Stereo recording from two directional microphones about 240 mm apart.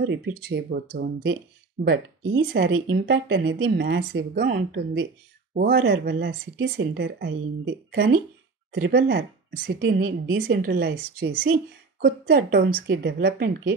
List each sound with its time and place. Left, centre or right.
0.0 s a woman's voice: right